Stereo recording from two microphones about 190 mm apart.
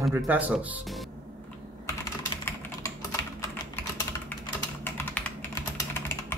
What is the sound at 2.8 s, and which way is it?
Typing, 15° left (ahead or behind).